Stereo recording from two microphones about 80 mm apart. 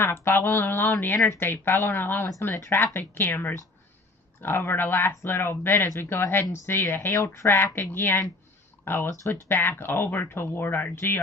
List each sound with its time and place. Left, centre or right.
0.0 s speech: left
7.1 s speech: left
7.4 s speech: left